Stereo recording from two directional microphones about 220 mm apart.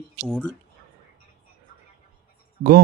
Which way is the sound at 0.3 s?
Centre (ahead or behind).